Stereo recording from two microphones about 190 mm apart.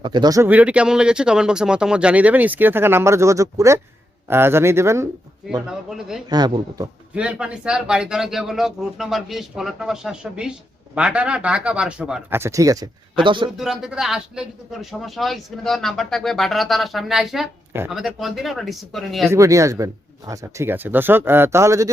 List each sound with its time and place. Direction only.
0.0 s speech: 25° right (ahead or behind)
5.6 s speech: centre (ahead or behind)
6.3 s speech: 20° right (ahead or behind)
7.2 s speech: 5° right (ahead or behind); by 13.5 s 25° right (ahead or behind)
13.6 s speech: 5° right (ahead or behind)
19.3 s speech: 15° right (ahead or behind)